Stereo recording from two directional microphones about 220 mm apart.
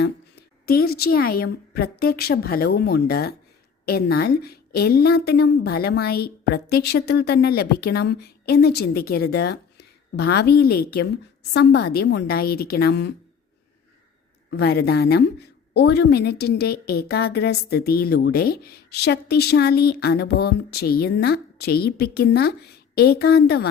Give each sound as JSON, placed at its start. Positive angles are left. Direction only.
{"t": 0.0, "sound": "a woman's voice", "side_deg": 45}
{"t": 14.6, "sound": "a woman's voice", "side_deg": 45}